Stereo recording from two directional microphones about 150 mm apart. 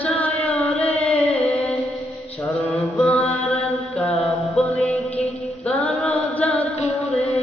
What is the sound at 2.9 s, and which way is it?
Music, centre (ahead or behind).